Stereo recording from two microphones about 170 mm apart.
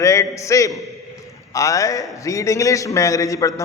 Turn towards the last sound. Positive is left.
turn(degrees=20)  # may be behind; listen again after turning